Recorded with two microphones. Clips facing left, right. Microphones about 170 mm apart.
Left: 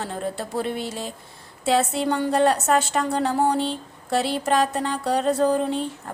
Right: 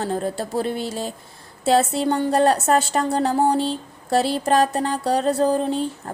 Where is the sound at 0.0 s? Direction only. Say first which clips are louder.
Right 4 dB; 35° right (ahead or behind).